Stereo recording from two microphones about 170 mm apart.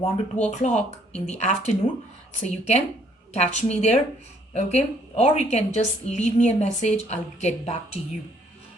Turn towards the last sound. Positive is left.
turn(degrees=40)  # may be behind; listen again after turning